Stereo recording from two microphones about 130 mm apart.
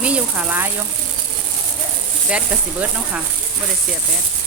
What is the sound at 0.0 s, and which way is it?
Speech, 10° right (ahead or behind).